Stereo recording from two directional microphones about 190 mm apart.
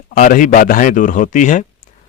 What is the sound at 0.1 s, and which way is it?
Speech, 45° left (ahead or behind).